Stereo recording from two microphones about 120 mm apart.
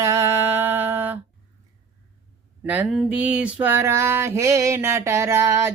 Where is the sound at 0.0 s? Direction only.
25° right (ahead or behind).